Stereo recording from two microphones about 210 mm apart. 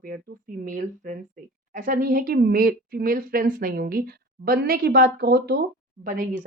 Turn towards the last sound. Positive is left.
turn(degrees=-40)  # may be behind; listen again after turning